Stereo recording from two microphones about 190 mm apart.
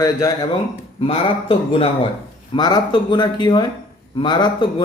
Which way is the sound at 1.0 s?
30° left (ahead or behind).